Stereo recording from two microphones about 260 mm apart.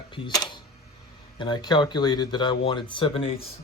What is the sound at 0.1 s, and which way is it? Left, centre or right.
Speech, centre.